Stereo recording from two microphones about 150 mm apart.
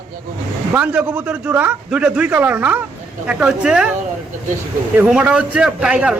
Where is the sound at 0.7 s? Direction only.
10° right (ahead or behind).